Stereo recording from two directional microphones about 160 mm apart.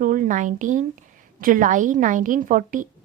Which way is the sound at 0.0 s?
60° right (ahead or behind).